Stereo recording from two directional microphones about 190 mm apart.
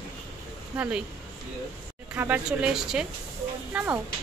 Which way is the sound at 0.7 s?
10° right (ahead or behind).